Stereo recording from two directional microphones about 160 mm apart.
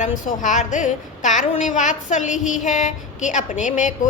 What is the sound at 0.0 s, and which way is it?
A woman's voice, 50° left (ahead or behind).